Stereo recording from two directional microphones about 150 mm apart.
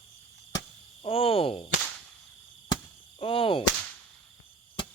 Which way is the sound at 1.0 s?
40° left (ahead or behind).